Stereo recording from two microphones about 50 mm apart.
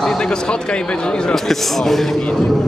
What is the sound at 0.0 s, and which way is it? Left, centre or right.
A man's voice, centre.